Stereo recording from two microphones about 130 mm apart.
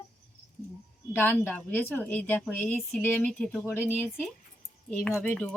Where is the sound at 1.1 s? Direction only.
15° left (ahead or behind).